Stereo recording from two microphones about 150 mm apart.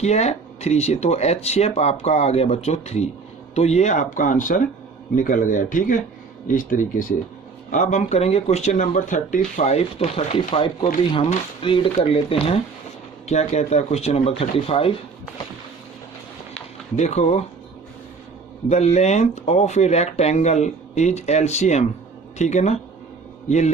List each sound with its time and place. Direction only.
0.0 s speech: 45° left (ahead or behind)
9.6 s speech: 45° left (ahead or behind)
17.0 s speech: 45° left (ahead or behind)
18.7 s speech: 45° left (ahead or behind)